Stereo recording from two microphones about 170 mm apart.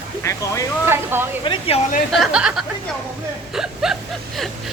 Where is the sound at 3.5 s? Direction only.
5° right (ahead or behind).